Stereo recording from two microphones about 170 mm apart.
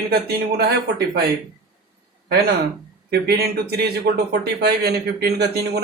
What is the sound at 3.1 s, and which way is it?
Speech, 75° right (ahead or behind).